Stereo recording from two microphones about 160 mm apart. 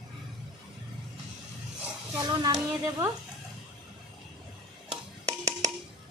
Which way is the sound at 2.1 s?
25° right (ahead or behind).